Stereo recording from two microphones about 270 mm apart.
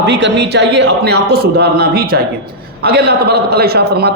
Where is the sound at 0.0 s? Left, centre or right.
Right.